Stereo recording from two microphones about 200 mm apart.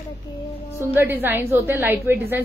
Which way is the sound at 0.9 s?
10° right (ahead or behind).